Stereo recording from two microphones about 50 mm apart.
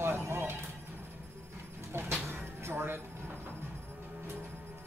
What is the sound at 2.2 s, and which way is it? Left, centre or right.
Music, right.